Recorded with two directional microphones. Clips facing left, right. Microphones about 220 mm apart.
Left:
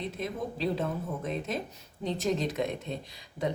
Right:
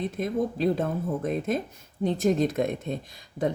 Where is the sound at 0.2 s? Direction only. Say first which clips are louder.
Right 8 dB; 50° right (ahead or behind).